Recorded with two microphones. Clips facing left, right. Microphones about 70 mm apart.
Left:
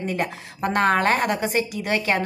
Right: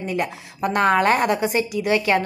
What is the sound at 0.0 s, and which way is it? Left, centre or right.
A woman's voice, left.